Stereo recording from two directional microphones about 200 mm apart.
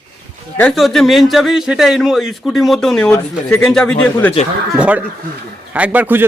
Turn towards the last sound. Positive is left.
turn(degrees=-10)  # may be behind; listen again after turning